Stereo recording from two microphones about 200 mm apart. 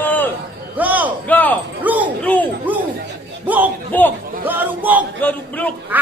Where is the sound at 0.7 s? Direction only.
10° right (ahead or behind).